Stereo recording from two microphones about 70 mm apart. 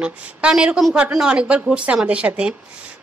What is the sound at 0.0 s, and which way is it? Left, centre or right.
A woman's voice, centre.